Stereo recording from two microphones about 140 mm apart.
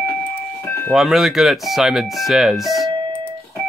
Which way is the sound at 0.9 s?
Centre (ahead or behind).